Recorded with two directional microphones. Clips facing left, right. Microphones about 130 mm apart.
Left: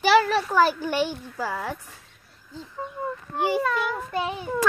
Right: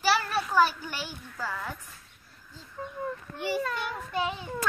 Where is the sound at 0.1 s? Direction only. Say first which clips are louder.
Left 9 dB; 90° left.